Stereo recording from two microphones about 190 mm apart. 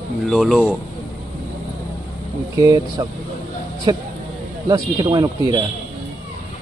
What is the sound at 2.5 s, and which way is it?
Speech, 20° right (ahead or behind).